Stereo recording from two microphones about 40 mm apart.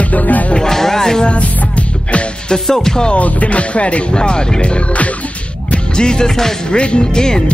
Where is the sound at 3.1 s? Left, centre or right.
Left.